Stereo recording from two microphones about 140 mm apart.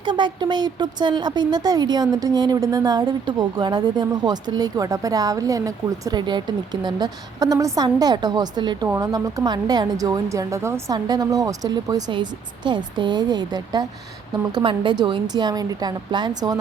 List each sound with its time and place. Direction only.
0.0 s a woman's voice: 35° right (ahead or behind)